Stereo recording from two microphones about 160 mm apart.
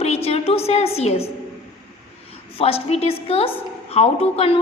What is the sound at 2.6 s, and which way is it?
A woman's voice, 35° left (ahead or behind).